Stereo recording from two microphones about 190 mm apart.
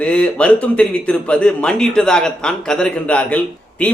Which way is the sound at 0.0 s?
5° left (ahead or behind).